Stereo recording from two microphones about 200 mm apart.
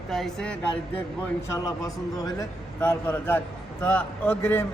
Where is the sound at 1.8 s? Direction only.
20° left (ahead or behind).